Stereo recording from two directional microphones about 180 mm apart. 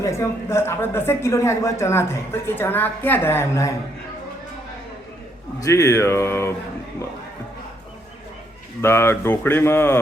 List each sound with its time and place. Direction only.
0.0 s speech: 15° left (ahead or behind)
5.5 s speech: 20° left (ahead or behind)
8.8 s speech: 15° left (ahead or behind)